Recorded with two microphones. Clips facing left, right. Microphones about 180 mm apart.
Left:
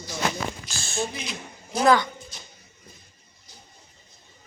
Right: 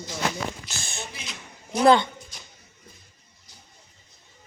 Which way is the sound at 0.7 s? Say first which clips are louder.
Left 7 dB; 20° right (ahead or behind).